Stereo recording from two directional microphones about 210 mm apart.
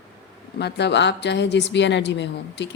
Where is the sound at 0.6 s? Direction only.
55° left (ahead or behind).